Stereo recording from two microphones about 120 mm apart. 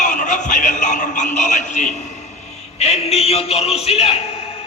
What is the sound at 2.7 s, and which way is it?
A man's voice, 60° left (ahead or behind).